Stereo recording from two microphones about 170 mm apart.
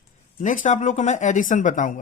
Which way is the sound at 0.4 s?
45° left (ahead or behind).